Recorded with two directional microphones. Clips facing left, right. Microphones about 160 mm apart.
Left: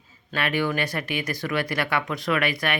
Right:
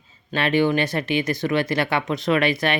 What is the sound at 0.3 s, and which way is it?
Speech, 25° right (ahead or behind).